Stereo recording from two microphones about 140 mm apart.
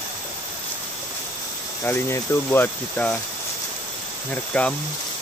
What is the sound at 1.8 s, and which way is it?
Speech, 15° left (ahead or behind).